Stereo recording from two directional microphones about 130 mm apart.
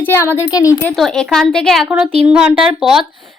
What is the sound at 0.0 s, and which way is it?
Speech, 15° left (ahead or behind).